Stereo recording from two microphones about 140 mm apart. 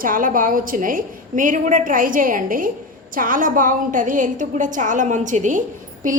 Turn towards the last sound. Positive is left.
turn(degrees=-65)  # may be behind; listen again after turning